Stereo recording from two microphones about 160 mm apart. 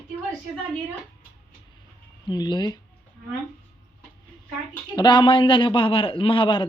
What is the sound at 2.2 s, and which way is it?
Speech, 25° left (ahead or behind).